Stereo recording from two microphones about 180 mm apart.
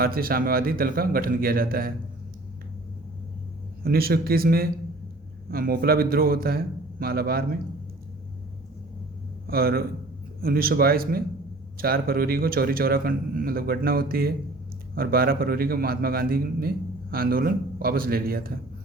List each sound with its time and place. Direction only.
0.0 s a man's voice: 55° right (ahead or behind)
3.8 s a man's voice: 55° right (ahead or behind)
9.5 s a man's voice: 55° right (ahead or behind)